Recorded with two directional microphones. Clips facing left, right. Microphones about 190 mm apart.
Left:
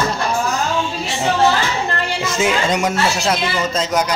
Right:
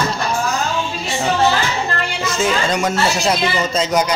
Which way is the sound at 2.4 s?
15° left (ahead or behind).